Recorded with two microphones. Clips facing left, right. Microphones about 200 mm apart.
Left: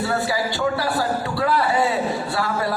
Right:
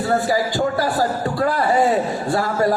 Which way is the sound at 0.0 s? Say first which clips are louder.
Right 4 dB; 45° right (ahead or behind).